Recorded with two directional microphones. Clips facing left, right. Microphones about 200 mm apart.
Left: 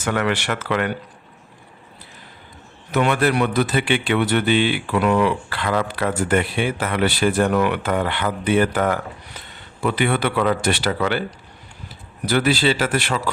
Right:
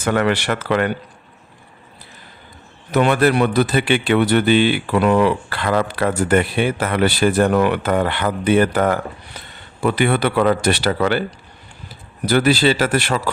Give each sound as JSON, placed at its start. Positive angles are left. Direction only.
{"t": 0.0, "sound": "speech", "side_deg": -40}
{"t": 2.9, "sound": "speech", "side_deg": -35}
{"t": 12.2, "sound": "speech", "side_deg": -40}